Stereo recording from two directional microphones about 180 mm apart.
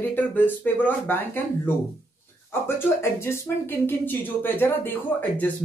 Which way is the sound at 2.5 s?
15° left (ahead or behind).